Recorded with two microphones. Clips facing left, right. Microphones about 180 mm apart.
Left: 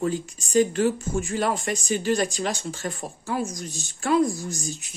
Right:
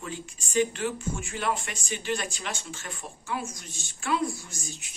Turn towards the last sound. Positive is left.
turn(degrees=40)  # may be behind; listen again after turning